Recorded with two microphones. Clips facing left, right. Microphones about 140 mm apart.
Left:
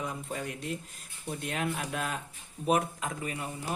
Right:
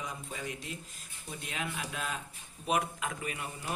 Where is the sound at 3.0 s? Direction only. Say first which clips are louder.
Left 2 dB; 30° left (ahead or behind).